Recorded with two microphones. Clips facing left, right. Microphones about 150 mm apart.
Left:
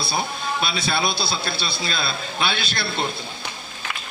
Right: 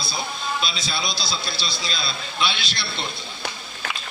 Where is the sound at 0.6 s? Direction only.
60° left (ahead or behind).